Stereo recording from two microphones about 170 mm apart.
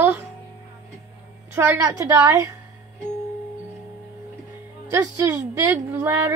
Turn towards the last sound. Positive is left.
turn(degrees=-15)  # may be behind; listen again after turning